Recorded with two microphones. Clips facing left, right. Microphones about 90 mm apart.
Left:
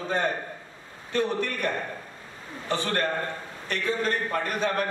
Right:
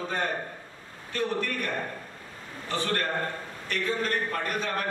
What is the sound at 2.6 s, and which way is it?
Speech, 25° left (ahead or behind).